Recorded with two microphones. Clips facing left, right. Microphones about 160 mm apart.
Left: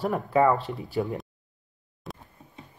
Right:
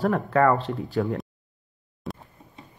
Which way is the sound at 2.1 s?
Centre (ahead or behind).